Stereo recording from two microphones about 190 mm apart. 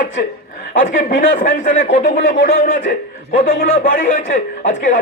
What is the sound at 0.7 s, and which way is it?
A man's voice, 45° left (ahead or behind).